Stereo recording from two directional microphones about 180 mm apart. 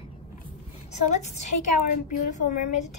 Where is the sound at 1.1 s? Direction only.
40° left (ahead or behind).